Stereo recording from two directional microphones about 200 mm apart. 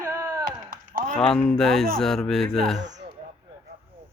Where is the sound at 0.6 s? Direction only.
40° right (ahead or behind).